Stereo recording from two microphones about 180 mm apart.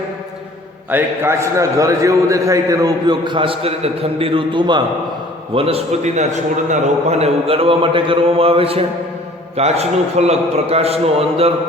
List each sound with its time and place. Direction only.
0.9 s a man's voice: 10° right (ahead or behind); by 11.5 s 35° right (ahead or behind)